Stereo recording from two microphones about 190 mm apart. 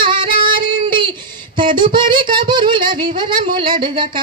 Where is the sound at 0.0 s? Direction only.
25° right (ahead or behind).